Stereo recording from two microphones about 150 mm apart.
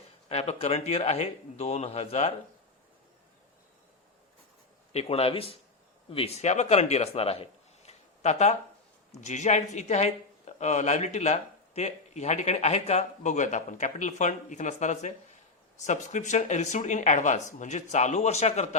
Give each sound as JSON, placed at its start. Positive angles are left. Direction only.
{"t": 0.3, "sound": "speech", "side_deg": 45}
{"t": 4.9, "sound": "speech", "side_deg": 45}